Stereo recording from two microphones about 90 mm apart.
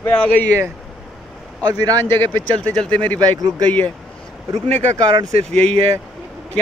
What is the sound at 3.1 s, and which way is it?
Speech, 45° right (ahead or behind).